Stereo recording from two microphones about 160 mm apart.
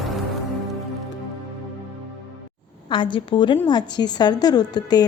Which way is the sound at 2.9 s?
30° left (ahead or behind).